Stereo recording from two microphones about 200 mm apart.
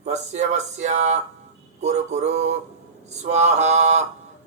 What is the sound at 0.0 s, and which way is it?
Mantra, 35° right (ahead or behind).